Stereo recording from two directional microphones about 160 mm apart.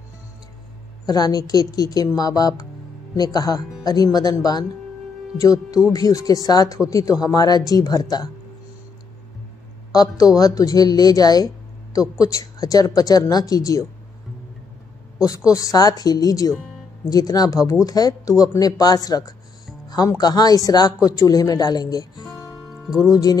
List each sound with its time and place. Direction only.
1.0 s a woman's voice: 25° left (ahead or behind)
10.3 s a woman's voice: 20° left (ahead or behind)
15.2 s a woman's voice: 20° left (ahead or behind)
22.7 s music: 5° right (ahead or behind)
23.0 s a woman's voice: 20° left (ahead or behind)